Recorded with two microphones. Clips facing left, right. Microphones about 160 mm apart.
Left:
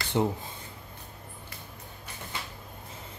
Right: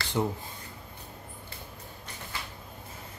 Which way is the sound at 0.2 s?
20° left (ahead or behind).